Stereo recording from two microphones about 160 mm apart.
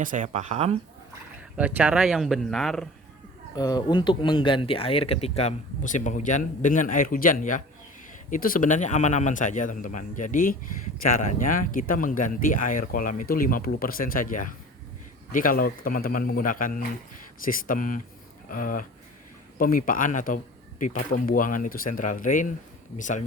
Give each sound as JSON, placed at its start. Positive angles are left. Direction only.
{"t": 0.0, "sound": "speech", "side_deg": -55}
{"t": 1.5, "sound": "speech", "side_deg": -10}
{"t": 3.5, "sound": "a man's voice", "side_deg": 25}